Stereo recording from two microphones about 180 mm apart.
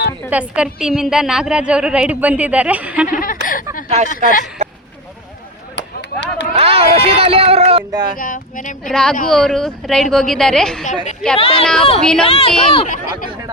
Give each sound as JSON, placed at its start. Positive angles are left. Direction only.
{"t": 0.3, "sound": "a woman's voice", "side_deg": -5}
{"t": 3.1, "sound": "speech", "side_deg": 50}
{"t": 3.4, "sound": "a sound", "side_deg": 50}
{"t": 3.8, "sound": "speech", "side_deg": -40}
{"t": 4.1, "sound": "speech", "side_deg": 50}
{"t": 5.7, "sound": "a sound", "side_deg": 85}
{"t": 6.5, "sound": "a sound", "side_deg": -35}
{"t": 8.1, "sound": "speech", "side_deg": 50}
{"t": 8.8, "sound": "a woman's voice", "side_deg": 5}
{"t": 11.3, "sound": "speech", "side_deg": 35}
{"t": 11.6, "sound": "a woman's voice", "side_deg": 5}
{"t": 12.2, "sound": "speech", "side_deg": 30}
{"t": 12.9, "sound": "speech", "side_deg": 50}